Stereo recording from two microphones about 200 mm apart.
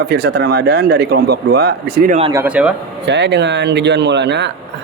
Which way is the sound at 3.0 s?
60° right (ahead or behind).